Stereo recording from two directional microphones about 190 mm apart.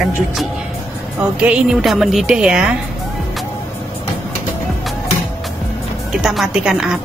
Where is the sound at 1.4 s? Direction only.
5° right (ahead or behind).